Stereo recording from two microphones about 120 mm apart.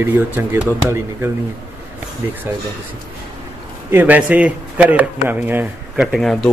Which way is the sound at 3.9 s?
15° right (ahead or behind).